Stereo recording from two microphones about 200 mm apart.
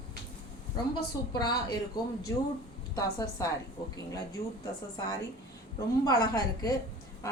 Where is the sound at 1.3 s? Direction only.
20° left (ahead or behind).